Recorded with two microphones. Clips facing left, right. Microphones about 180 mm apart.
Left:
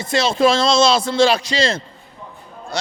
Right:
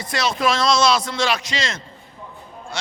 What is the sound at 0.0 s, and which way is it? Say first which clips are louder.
A man's voice: left 6 dB; 25° left (ahead or behind).